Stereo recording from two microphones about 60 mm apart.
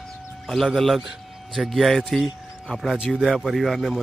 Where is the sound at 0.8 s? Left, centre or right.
Centre.